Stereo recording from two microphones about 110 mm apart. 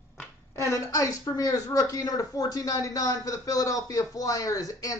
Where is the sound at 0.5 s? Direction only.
30° left (ahead or behind).